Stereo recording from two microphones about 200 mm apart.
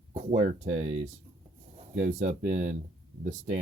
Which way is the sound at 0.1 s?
35° right (ahead or behind).